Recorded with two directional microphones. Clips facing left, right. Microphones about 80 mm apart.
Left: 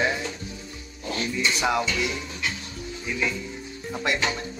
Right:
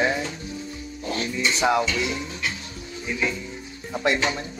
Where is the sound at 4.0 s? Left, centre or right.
Right.